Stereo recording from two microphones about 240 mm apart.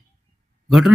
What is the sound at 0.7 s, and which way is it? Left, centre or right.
Speech, centre.